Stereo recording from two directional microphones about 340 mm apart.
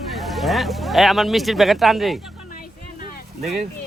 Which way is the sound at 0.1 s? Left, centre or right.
Centre.